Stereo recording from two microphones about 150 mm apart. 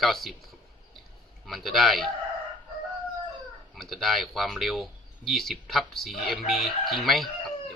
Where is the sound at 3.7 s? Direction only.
Centre (ahead or behind).